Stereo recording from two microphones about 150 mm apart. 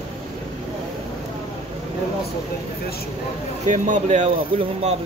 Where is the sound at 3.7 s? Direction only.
55° right (ahead or behind).